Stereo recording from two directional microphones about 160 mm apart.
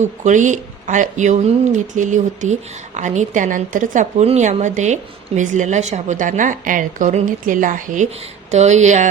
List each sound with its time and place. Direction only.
0.0 s speech: 50° right (ahead or behind)